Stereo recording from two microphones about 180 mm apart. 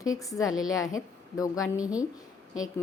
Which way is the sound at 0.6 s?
20° left (ahead or behind).